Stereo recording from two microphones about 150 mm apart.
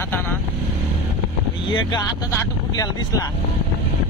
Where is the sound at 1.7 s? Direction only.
30° left (ahead or behind).